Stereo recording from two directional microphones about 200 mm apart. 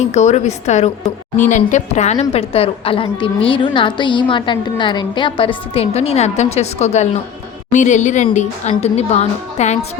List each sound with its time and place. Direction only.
0.0 s a woman's voice: 35° left (ahead or behind)